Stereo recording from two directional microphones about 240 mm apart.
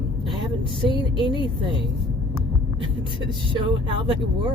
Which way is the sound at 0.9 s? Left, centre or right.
Centre.